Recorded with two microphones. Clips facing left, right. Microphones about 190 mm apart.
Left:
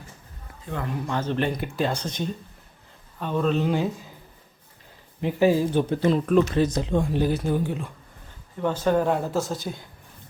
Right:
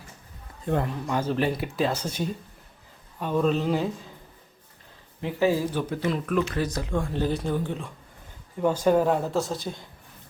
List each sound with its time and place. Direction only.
1.0 s speech: 5° right (ahead or behind)
5.2 s speech: 15° left (ahead or behind)
5.8 s speech: 30° left (ahead or behind); by 7.9 s 5° left (ahead or behind)
8.6 s speech: 10° right (ahead or behind)